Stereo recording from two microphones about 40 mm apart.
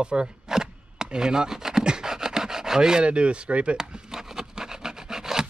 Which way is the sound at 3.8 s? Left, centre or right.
Centre.